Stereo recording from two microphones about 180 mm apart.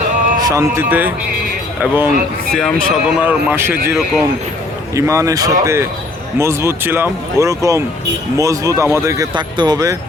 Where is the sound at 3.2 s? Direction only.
10° right (ahead or behind).